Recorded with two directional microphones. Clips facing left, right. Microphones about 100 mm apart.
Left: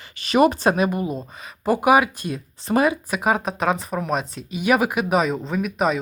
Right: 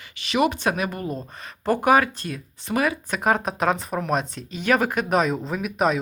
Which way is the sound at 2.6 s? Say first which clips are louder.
Left 4 dB; 30° left (ahead or behind).